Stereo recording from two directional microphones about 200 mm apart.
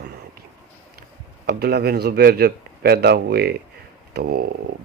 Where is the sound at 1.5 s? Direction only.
50° right (ahead or behind).